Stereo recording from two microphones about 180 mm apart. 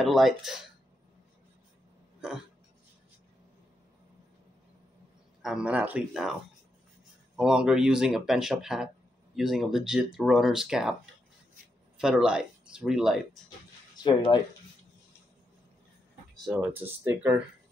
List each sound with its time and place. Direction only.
0.0 s speech: centre (ahead or behind)
5.4 s speech: 5° right (ahead or behind)
7.3 s speech: 5° right (ahead or behind)
12.0 s speech: 5° right (ahead or behind)
13.9 s speech: 25° left (ahead or behind)
16.4 s speech: 10° right (ahead or behind)